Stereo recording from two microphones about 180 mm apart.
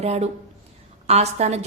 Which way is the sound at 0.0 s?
35° right (ahead or behind).